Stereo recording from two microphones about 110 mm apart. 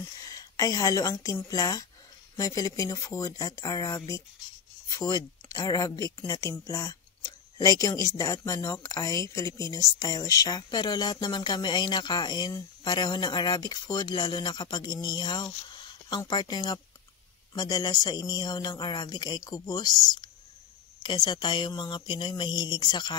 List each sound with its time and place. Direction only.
0.2 s speech: 30° left (ahead or behind)
4.8 s a sound: 35° left (ahead or behind)
5.7 s a woman's voice: 35° left (ahead or behind)